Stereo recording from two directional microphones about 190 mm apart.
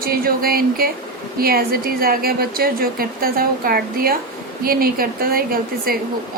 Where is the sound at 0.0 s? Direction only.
50° right (ahead or behind).